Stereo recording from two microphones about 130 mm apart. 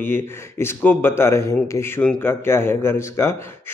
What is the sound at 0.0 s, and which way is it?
Speech, 15° left (ahead or behind).